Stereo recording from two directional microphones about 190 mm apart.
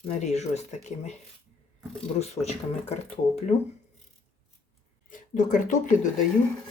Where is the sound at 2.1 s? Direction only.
35° left (ahead or behind).